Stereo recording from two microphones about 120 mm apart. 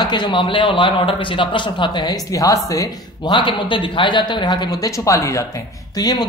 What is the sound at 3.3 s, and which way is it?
Speech, 45° left (ahead or behind).